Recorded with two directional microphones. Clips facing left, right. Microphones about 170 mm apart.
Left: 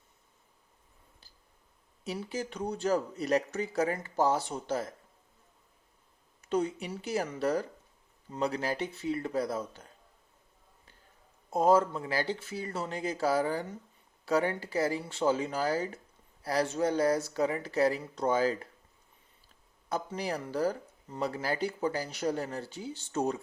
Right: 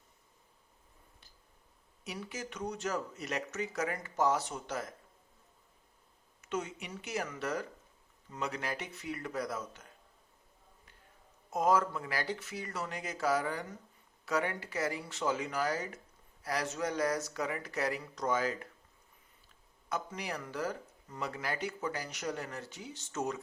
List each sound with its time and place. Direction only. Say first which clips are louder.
1.2 s tick: left 1 dB; 30° left (ahead or behind)
2.0 s speech: left 6 dB; 30° left (ahead or behind)
6.4 s speech: left 7 dB; 35° left (ahead or behind)
11.5 s speech: left 5 dB; 30° left (ahead or behind)
19.9 s speech: left 5 dB; 30° left (ahead or behind)